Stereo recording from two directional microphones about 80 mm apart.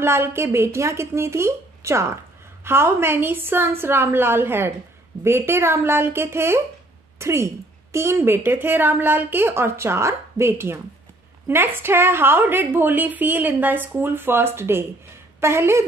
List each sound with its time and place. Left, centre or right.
0.0 s a woman's voice: right